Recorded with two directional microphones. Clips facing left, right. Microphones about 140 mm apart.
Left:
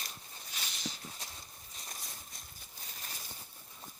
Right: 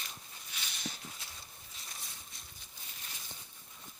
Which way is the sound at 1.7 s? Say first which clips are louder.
Left 3 dB; 45° left (ahead or behind).